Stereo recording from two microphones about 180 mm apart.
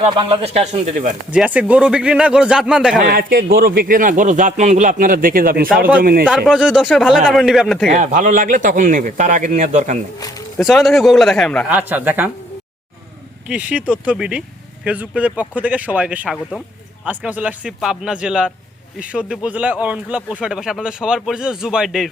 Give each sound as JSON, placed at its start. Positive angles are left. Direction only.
{"t": 0.0, "sound": "speech", "side_deg": -30}
{"t": 1.3, "sound": "speech", "side_deg": -5}
{"t": 3.1, "sound": "a man's voice", "side_deg": -55}
{"t": 6.2, "sound": "speech", "side_deg": -5}
{"t": 7.9, "sound": "a man's voice", "side_deg": -45}
{"t": 10.6, "sound": "speech", "side_deg": 0}
{"t": 11.7, "sound": "a man's voice", "side_deg": -10}
{"t": 13.5, "sound": "a man's voice", "side_deg": -10}
{"t": 17.1, "sound": "speech", "side_deg": -10}